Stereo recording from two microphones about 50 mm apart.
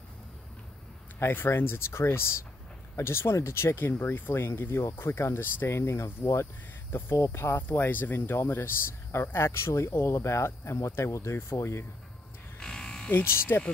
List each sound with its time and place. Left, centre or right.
1.2 s speech: left
1.9 s speech: left
5.8 s speech: left
6.9 s speech: left
7.7 s speech: left
11.3 s speech: left
12.5 s electric shaver: centre
13.2 s speech: left